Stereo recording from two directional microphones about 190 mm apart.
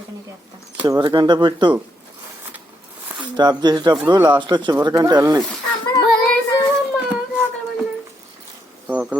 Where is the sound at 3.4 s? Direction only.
20° right (ahead or behind).